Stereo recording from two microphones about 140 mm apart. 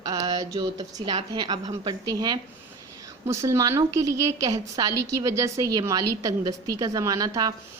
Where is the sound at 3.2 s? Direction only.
20° right (ahead or behind).